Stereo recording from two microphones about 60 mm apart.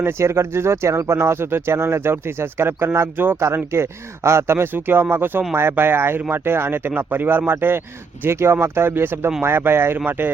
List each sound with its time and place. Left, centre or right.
0.0 s speech: right